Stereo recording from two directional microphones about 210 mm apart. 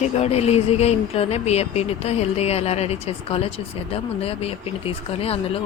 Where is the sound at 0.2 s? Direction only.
30° left (ahead or behind).